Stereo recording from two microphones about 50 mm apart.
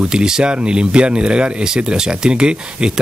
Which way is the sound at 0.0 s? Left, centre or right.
Centre.